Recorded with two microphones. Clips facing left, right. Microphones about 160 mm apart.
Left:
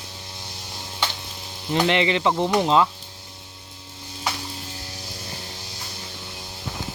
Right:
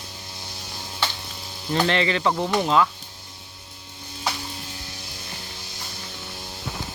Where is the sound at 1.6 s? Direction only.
15° left (ahead or behind).